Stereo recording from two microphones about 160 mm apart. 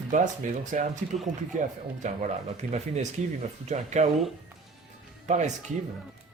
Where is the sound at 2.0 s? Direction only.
50° right (ahead or behind).